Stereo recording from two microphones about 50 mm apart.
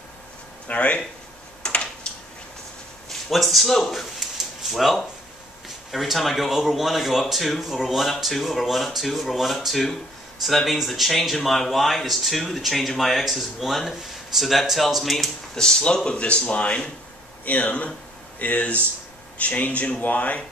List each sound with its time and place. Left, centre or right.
0.7 s speech: left
3.1 s speech: centre
15.5 s speech: centre; by 20.4 s left